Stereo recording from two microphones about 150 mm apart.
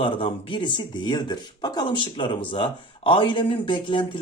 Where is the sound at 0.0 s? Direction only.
35° left (ahead or behind).